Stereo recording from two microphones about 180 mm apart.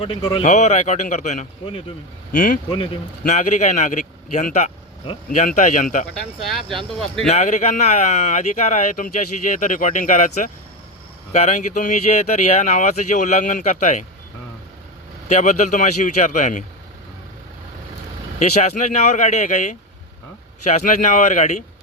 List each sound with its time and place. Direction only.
0.0 s speech: 25° left (ahead or behind)
0.4 s speech: 40° left (ahead or behind)
2.6 s speech: 30° left (ahead or behind)
3.2 s speech: 40° left (ahead or behind)
6.9 s speech: centre (ahead or behind)
7.3 s speech: 40° left (ahead or behind)
15.3 s speech: 40° left (ahead or behind)
18.3 s speech: 40° left (ahead or behind)